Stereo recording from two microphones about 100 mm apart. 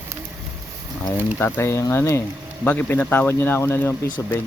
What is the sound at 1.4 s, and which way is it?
Speech, 25° left (ahead or behind).